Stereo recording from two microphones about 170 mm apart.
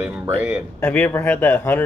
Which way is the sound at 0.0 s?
10° right (ahead or behind).